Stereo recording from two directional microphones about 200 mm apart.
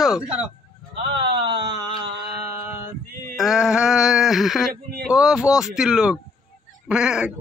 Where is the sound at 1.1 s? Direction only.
60° right (ahead or behind).